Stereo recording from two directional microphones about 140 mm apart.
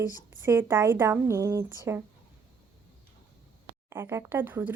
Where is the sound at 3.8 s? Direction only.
20° right (ahead or behind).